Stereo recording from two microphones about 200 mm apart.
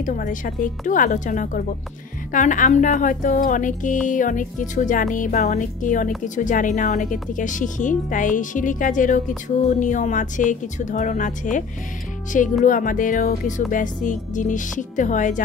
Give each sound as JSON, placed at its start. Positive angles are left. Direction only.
{"t": 0.0, "sound": "speech", "side_deg": 40}
{"t": 12.6, "sound": "speech", "side_deg": 40}